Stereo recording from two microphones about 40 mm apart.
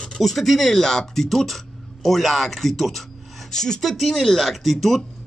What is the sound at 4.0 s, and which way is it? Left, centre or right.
Speech, centre.